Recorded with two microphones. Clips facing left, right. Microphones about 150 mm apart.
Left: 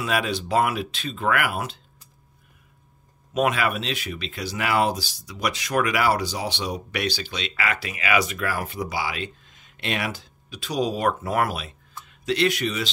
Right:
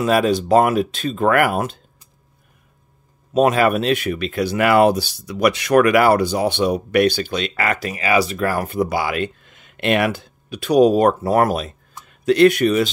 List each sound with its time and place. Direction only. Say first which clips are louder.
0.0 s speech: right 9 dB; 40° right (ahead or behind)
3.3 s speech: right 8 dB; 40° right (ahead or behind)